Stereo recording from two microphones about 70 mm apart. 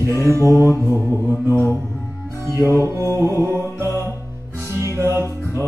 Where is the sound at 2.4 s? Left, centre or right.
Right.